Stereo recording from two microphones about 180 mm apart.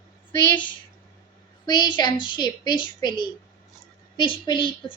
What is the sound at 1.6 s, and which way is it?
A woman's voice, 25° left (ahead or behind).